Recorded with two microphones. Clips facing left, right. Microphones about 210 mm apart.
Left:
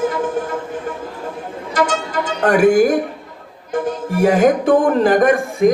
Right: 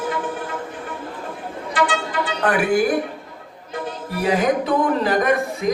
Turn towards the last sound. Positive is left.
turn(degrees=50)  # may be behind; listen again after turning